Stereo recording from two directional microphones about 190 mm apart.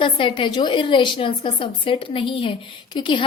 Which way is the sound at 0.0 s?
25° left (ahead or behind).